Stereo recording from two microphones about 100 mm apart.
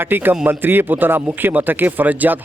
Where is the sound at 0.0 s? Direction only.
20° right (ahead or behind).